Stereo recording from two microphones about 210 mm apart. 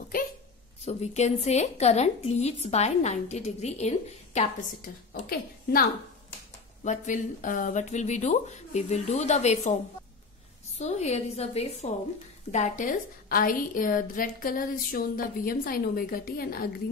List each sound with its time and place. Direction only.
0.8 s a woman's voice: 30° left (ahead or behind)
5.1 s a woman's voice: 45° left (ahead or behind)
10.8 s a woman's voice: 30° left (ahead or behind)